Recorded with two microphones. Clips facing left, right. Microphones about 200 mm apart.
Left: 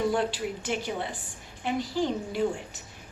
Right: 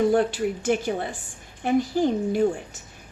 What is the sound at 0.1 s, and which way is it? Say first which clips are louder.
A man's voice: right 6 dB; 50° right (ahead or behind).